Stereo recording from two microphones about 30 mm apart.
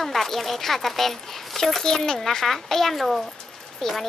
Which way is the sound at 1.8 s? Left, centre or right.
Centre.